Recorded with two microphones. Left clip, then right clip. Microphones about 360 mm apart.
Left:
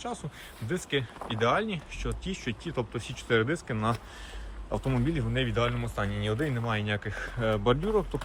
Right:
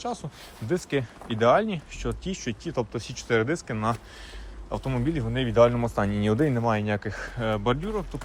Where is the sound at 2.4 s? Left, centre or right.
Centre.